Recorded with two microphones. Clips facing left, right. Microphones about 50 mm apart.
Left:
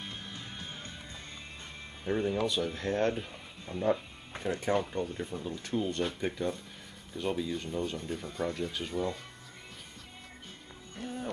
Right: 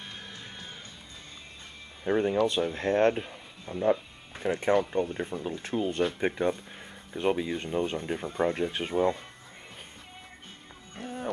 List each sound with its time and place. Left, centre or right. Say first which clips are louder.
2.0 s speech: right 5 dB; right
2.3 s speech: right 5 dB; right
3.6 s speech: right 4 dB; centre
4.5 s speech: right 5 dB; right
11.0 s music: right 1 dB; right